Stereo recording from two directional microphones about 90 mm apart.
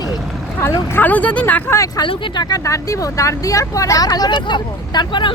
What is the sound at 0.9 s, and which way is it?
Speech, 20° left (ahead or behind).